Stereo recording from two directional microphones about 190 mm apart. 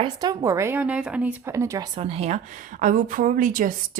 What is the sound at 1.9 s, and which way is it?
Speech, 30° right (ahead or behind).